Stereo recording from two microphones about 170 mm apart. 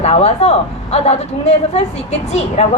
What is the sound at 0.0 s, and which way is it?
Speech, 40° left (ahead or behind).